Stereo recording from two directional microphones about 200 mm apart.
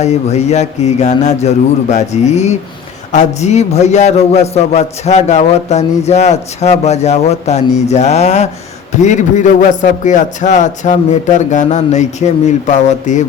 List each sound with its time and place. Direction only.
0.0 s a man's voice: 35° left (ahead or behind)